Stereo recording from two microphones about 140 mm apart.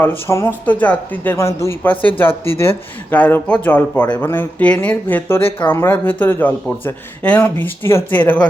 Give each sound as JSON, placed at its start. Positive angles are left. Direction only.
{"t": 0.3, "sound": "speech", "side_deg": 15}
{"t": 5.4, "sound": "speech", "side_deg": 40}
{"t": 5.6, "sound": "speech", "side_deg": 15}